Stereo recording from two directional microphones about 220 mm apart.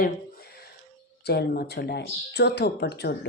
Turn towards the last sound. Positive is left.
turn(degrees=45)  # may be behind; listen again after turning